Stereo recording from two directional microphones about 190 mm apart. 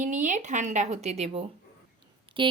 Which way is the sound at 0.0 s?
40° right (ahead or behind).